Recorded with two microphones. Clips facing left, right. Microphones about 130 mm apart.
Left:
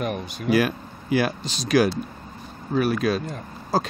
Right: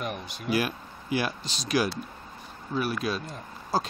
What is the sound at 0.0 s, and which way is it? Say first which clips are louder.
Speech: left 7 dB; 55° left (ahead or behind).